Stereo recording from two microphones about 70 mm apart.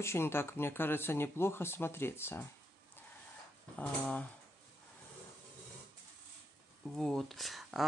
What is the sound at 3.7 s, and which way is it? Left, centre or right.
Speech, centre.